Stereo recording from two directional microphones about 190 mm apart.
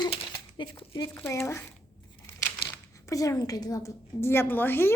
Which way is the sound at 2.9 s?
15° left (ahead or behind).